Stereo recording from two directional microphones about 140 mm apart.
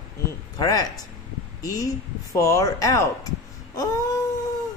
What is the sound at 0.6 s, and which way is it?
Speech, 25° left (ahead or behind).